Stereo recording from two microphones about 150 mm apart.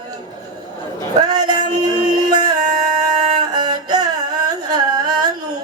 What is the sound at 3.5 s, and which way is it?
Music, 25° right (ahead or behind).